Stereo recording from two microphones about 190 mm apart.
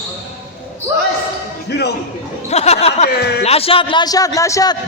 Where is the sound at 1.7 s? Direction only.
60° left (ahead or behind).